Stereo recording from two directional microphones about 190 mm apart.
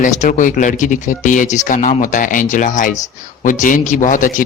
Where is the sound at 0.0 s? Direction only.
40° left (ahead or behind).